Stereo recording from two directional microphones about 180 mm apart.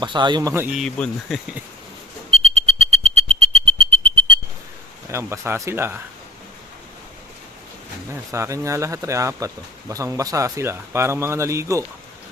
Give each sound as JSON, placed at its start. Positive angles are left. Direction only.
{"t": 0.0, "sound": "speech", "side_deg": -25}
{"t": 0.8, "sound": "speech", "side_deg": 5}
{"t": 2.3, "sound": "a sound", "side_deg": -35}
{"t": 5.0, "sound": "speech", "side_deg": -15}
{"t": 8.1, "sound": "speech", "side_deg": -15}